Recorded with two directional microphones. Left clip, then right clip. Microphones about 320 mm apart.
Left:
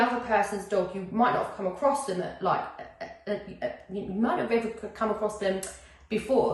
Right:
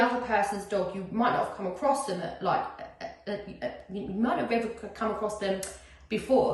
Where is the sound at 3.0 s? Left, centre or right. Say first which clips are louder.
Left 4 dB; centre.